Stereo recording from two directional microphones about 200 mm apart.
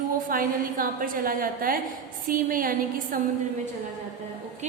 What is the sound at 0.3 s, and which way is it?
A woman's voice, 45° right (ahead or behind).